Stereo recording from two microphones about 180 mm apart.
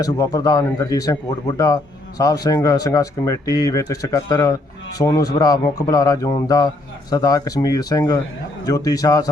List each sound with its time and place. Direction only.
0.0 s speech: 20° left (ahead or behind)